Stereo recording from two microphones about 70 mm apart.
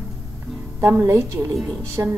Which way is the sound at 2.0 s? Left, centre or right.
Right.